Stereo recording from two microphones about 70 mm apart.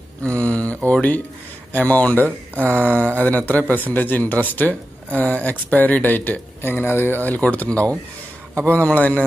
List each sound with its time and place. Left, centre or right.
0.2 s mantra: centre
0.7 s a sound: centre
1.7 s a man's voice: left